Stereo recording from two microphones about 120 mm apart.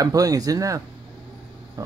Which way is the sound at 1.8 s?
30° right (ahead or behind).